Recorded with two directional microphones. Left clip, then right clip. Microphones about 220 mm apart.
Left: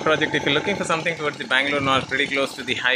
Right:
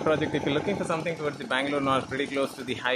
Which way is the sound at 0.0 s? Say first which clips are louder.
Left 6 dB; centre (ahead or behind).